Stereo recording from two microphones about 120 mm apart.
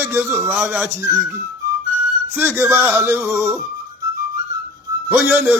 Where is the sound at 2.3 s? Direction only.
15° right (ahead or behind).